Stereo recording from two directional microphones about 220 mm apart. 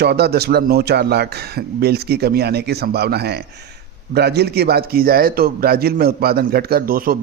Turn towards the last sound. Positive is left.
turn(degrees=-40)  # may be behind; listen again after turning